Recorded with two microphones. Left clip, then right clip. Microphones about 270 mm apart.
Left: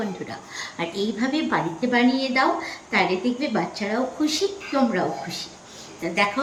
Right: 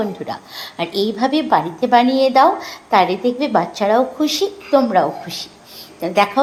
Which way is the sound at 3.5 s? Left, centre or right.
Right.